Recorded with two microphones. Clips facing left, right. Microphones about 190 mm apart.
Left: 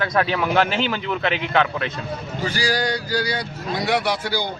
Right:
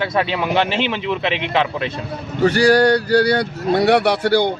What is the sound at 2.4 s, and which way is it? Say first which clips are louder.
Speech: right 11 dB; 65° right (ahead or behind).